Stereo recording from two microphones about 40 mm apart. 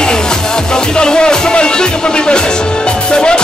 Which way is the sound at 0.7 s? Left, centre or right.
Centre.